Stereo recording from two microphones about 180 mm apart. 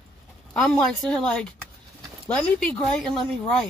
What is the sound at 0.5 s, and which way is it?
Speech, 5° left (ahead or behind).